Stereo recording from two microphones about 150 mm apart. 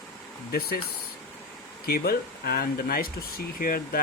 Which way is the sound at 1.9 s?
85° left.